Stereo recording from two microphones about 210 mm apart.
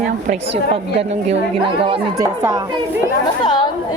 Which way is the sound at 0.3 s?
30° right (ahead or behind).